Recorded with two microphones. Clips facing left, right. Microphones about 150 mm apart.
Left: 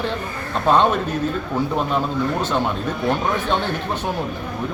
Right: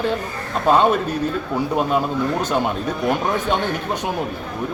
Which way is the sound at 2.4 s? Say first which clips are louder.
Right 1 dB; 10° right (ahead or behind).